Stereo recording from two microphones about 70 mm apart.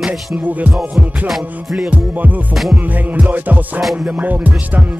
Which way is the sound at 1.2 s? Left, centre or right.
Centre.